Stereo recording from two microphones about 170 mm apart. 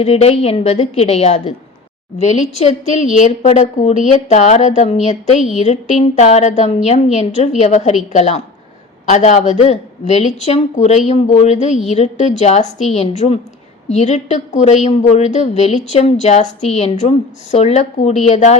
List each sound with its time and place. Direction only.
0.0 s a woman's voice: 40° left (ahead or behind)